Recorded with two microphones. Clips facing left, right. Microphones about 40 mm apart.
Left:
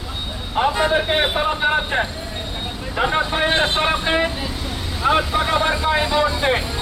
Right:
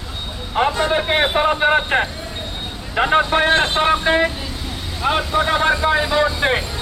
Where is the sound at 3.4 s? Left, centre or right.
Centre.